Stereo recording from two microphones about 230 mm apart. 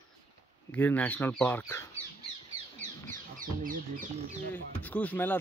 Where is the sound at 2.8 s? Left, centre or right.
Right.